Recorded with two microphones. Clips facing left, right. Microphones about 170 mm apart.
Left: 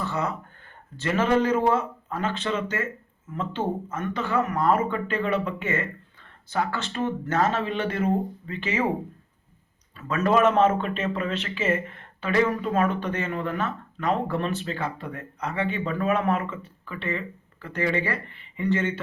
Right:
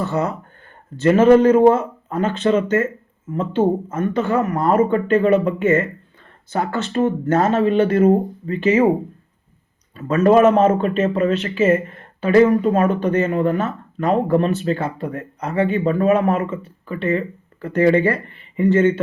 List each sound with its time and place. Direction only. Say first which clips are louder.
0.0 s speech: right 7 dB; 45° right (ahead or behind)
9.9 s speech: right 9 dB; 40° right (ahead or behind)